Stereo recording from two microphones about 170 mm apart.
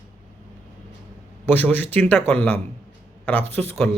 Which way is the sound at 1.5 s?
10° left (ahead or behind).